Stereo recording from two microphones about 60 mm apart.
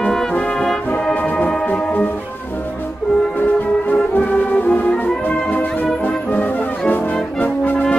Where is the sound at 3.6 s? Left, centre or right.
Left.